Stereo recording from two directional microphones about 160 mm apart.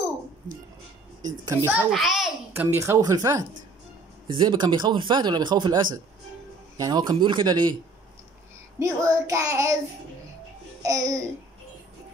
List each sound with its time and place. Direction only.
1.2 s speech: 25° right (ahead or behind)
1.7 s a child's voice: 5° right (ahead or behind)
2.5 s speech: 15° right (ahead or behind)
8.7 s speech: 20° right (ahead or behind)
10.8 s babbling: 20° right (ahead or behind)